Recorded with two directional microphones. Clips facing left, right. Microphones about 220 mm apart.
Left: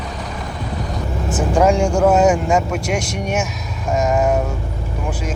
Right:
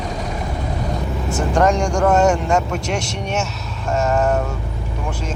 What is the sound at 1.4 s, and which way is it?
Speech, 10° left (ahead or behind).